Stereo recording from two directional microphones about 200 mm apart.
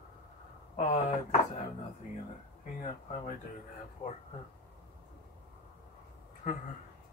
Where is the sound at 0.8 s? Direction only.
35° left (ahead or behind).